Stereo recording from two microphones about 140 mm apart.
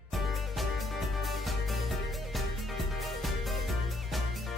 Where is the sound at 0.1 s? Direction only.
Centre (ahead or behind).